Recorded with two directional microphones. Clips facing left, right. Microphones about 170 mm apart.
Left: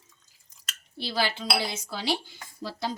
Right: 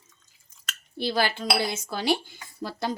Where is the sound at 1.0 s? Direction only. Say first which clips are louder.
Right 3 dB; 55° right (ahead or behind).